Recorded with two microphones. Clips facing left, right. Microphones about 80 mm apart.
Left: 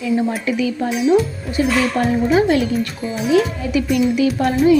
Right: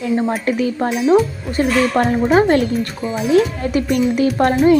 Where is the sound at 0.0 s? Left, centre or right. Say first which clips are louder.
Right 1 dB; right.